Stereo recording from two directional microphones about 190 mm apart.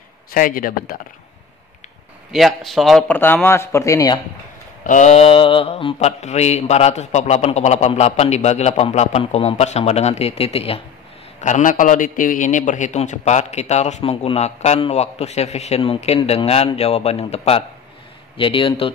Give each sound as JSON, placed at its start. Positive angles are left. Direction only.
{"t": 0.3, "sound": "a man's voice", "side_deg": 50}
{"t": 2.3, "sound": "a man's voice", "side_deg": 0}
{"t": 4.8, "sound": "a man's voice", "side_deg": 40}